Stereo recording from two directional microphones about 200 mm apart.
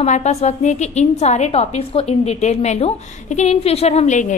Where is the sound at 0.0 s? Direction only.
35° left (ahead or behind).